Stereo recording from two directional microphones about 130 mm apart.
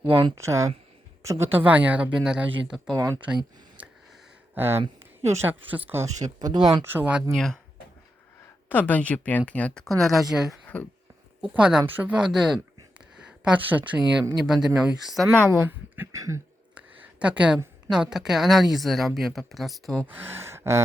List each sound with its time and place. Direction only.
0.0 s speech: 40° right (ahead or behind)
0.3 s speech: 20° right (ahead or behind); by 2.9 s 5° right (ahead or behind)
2.9 s speech: 25° right (ahead or behind)
4.5 s speech: 15° right (ahead or behind); by 6.8 s 35° right (ahead or behind)
6.8 s speech: 15° right (ahead or behind)
7.3 s a woman's voice: 5° left (ahead or behind)
8.7 s a woman's voice: 10° left (ahead or behind)
15.3 s speech: 20° right (ahead or behind)
16.7 s a sound: 10° right (ahead or behind)
17.9 s a woman's voice: 5° right (ahead or behind)
20.1 s speech: 15° right (ahead or behind)